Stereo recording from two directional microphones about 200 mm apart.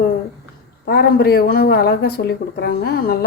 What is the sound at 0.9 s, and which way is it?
Speech, 50° left (ahead or behind).